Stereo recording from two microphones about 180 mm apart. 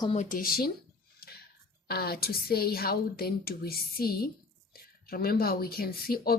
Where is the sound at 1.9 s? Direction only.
60° left (ahead or behind).